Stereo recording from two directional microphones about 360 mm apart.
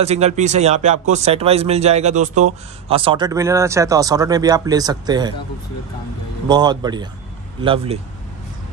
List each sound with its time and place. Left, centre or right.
0.0 s speech: centre
6.4 s speech: centre